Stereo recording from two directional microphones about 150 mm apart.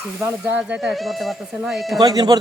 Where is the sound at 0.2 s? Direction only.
15° right (ahead or behind).